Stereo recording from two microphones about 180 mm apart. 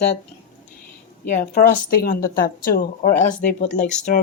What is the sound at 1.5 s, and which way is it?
A woman's voice, 50° left (ahead or behind).